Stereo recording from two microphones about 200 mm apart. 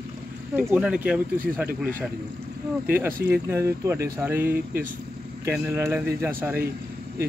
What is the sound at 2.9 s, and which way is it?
Speech, 10° right (ahead or behind).